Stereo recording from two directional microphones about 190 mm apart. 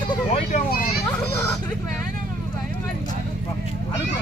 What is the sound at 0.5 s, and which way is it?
Children playing, 50° left (ahead or behind).